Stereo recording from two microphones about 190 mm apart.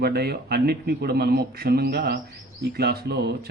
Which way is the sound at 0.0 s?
60° right (ahead or behind).